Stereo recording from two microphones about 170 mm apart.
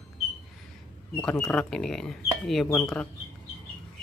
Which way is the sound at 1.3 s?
15° left (ahead or behind).